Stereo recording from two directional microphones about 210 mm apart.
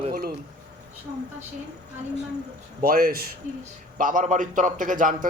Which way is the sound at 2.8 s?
45° right (ahead or behind).